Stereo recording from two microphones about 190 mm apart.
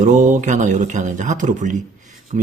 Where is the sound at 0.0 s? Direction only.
40° right (ahead or behind).